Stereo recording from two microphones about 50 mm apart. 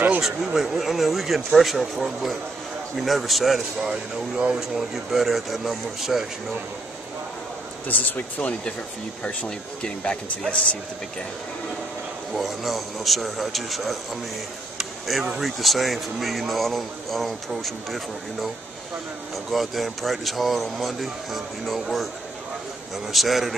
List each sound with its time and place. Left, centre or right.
0.2 s speech: centre
3.9 s speech: right
4.6 s speech: centre
7.9 s speech: left
12.3 s speech: centre
14.8 s a sound: centre
15.4 s speech: centre
19.5 s speech: centre
23.1 s speech: centre